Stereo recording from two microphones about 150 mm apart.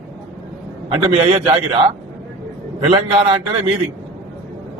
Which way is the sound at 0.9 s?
40° right (ahead or behind).